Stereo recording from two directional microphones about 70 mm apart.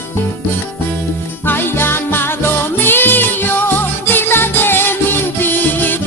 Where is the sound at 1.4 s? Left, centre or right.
Left.